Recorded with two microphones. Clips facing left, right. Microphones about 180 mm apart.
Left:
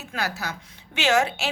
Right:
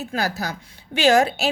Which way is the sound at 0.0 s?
35° right (ahead or behind).